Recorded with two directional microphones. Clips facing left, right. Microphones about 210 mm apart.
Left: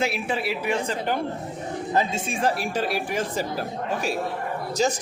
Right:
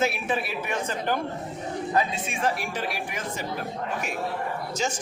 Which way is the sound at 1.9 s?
30° left (ahead or behind).